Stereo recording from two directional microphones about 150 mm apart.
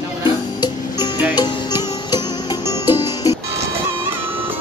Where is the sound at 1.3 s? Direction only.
30° left (ahead or behind).